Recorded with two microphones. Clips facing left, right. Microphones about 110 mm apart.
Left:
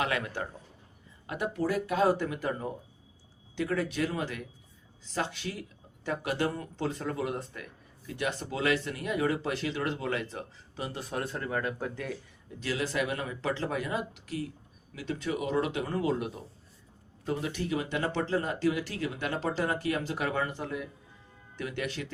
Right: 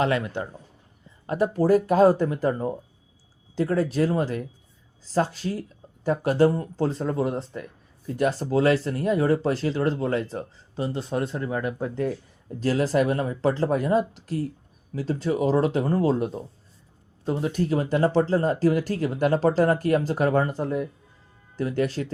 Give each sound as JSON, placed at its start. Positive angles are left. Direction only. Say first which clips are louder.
{"t": 0.0, "sound": "a man's voice", "louder": "right 7 dB", "side_deg": -25}
{"t": 1.3, "sound": "speech", "louder": "right 10 dB", "side_deg": -40}
{"t": 12.5, "sound": "speech", "louder": "right 9 dB", "side_deg": -40}